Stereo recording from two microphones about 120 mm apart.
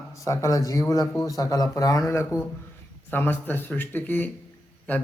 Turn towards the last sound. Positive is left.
turn(degrees=10)  # may be behind; listen again after turning